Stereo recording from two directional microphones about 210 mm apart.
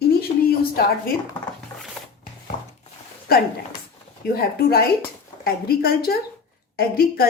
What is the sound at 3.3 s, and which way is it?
A woman's voice, 45° left (ahead or behind).